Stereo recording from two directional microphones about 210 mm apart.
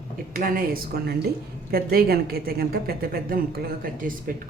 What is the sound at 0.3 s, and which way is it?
A woman's voice, 40° right (ahead or behind).